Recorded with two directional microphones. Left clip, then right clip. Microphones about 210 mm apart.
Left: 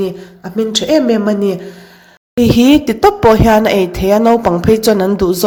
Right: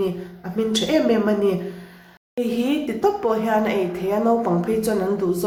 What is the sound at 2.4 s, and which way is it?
Speech, 45° left (ahead or behind).